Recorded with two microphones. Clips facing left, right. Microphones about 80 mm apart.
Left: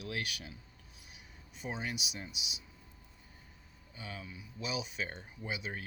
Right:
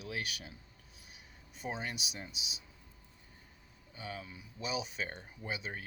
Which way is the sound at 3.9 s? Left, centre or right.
Right.